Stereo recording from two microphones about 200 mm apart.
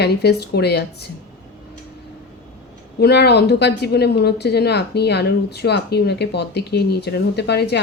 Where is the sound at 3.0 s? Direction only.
55° left (ahead or behind).